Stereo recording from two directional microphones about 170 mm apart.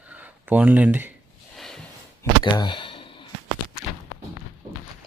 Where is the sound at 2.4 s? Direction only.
25° left (ahead or behind).